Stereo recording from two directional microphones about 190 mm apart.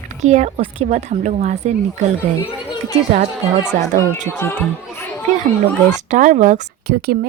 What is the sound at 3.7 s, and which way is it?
Speech, 40° right (ahead or behind).